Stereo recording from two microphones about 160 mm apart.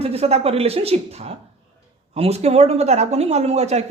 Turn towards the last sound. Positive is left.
turn(degrees=-45)  # may be behind; listen again after turning